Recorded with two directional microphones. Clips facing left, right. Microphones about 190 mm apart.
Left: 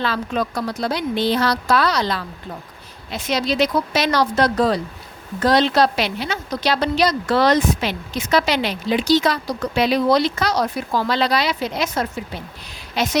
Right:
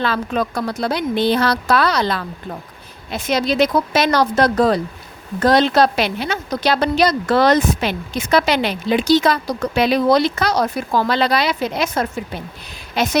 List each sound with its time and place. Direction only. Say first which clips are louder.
0.0 s a woman's voice: right 2 dB; 55° right (ahead or behind)